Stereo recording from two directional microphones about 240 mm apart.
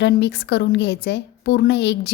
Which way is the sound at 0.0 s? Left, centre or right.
Left.